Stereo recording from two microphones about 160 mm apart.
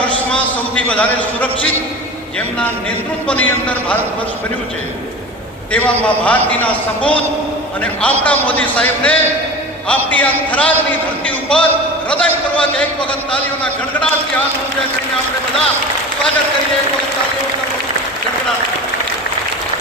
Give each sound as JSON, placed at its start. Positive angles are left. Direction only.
{"t": 0.0, "sound": "a man's voice", "side_deg": 10}
{"t": 3.2, "sound": "a man's voice", "side_deg": 10}
{"t": 5.7, "sound": "a man's voice", "side_deg": 10}